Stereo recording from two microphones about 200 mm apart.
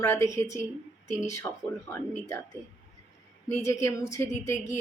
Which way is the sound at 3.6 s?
15° left (ahead or behind).